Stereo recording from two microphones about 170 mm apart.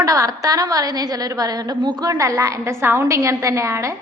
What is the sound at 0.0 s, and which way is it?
A woman's voice, 20° right (ahead or behind).